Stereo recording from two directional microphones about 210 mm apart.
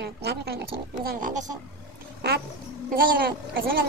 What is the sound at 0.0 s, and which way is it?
A woman's voice, 50° right (ahead or behind).